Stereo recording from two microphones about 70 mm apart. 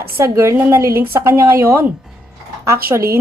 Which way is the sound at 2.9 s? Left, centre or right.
Right.